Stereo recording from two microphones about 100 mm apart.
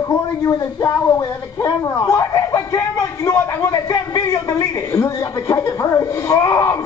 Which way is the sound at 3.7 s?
35° left (ahead or behind).